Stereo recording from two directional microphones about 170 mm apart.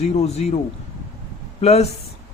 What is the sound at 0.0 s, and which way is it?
Speech, 40° left (ahead or behind).